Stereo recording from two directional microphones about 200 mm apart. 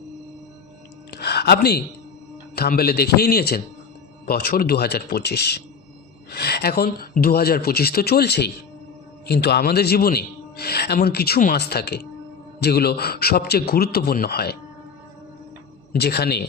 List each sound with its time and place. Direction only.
1.1 s a sound: 55° left (ahead or behind)
2.6 s a man's voice: 50° left (ahead or behind)
15.9 s a man's voice: 55° left (ahead or behind)